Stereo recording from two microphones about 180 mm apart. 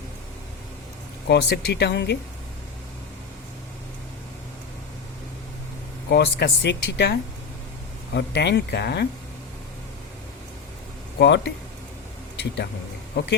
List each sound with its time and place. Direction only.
1.3 s speech: 70° left (ahead or behind)
6.1 s speech: 65° left (ahead or behind)
11.2 s speech: 75° left (ahead or behind)
13.2 s speech: 60° left (ahead or behind)